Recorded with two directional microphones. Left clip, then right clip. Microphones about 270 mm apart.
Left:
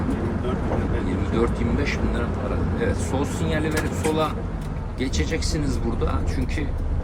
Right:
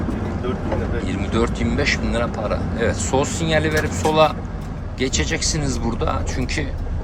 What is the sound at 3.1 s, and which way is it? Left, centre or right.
Speech, centre.